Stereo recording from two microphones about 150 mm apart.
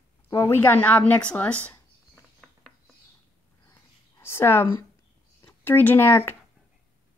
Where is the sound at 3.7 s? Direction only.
20° left (ahead or behind).